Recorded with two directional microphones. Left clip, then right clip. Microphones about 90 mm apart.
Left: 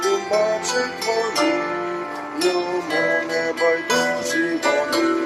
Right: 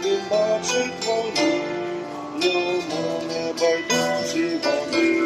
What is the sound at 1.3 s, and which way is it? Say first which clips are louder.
Music: left 2 dB; 30° right (ahead or behind).